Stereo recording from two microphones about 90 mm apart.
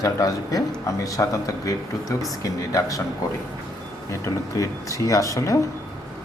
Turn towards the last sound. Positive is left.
turn(degrees=40)  # may be behind; listen again after turning